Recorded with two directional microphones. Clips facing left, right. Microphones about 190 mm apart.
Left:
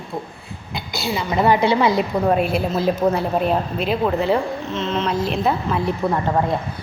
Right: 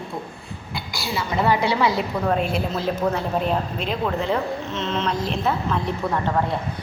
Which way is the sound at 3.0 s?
35° left (ahead or behind).